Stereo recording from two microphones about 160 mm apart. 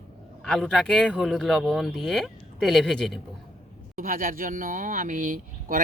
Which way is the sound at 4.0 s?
60° right (ahead or behind).